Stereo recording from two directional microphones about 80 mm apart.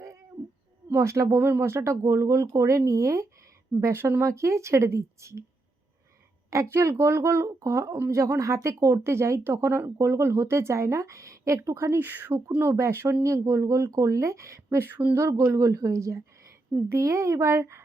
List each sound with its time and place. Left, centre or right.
0.9 s a woman's voice: right
1.4 s speech: right
6.5 s speech: right
14.8 s a sound: right
15.1 s a woman's voice: right